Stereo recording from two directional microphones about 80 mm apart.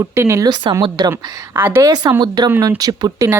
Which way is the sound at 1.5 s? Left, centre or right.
Right.